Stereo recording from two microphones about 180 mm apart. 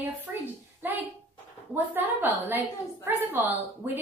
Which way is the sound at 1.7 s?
10° right (ahead or behind).